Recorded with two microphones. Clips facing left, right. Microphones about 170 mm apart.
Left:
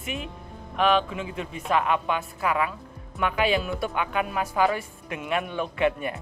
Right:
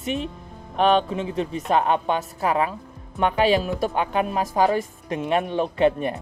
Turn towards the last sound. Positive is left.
turn(degrees=-35)  # may be behind; listen again after turning